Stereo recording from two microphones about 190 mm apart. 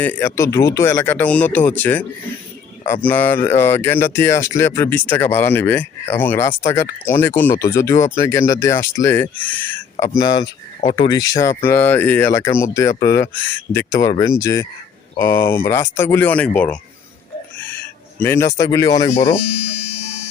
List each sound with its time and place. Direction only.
0.0 s speech: 10° left (ahead or behind)
10.2 s speech: 20° left (ahead or behind)
18.2 s speech: 15° left (ahead or behind)